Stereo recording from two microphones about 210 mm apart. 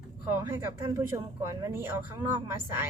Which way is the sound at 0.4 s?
10° right (ahead or behind).